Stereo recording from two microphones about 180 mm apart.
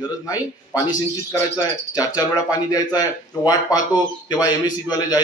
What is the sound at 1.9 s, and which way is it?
Speech, 20° left (ahead or behind).